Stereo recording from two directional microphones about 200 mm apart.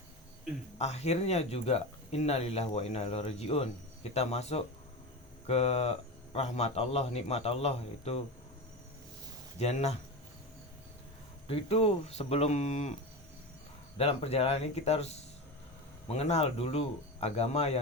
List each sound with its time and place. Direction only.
0.8 s speech: 35° left (ahead or behind)
9.6 s speech: 35° left (ahead or behind)
11.4 s speech: 30° left (ahead or behind)
14.0 s speech: 30° left (ahead or behind)